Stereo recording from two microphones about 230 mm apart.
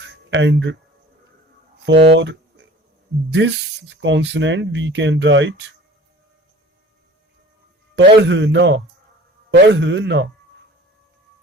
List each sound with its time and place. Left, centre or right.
0.0 s a sound: right
1.8 s speech: right
7.9 s speech: right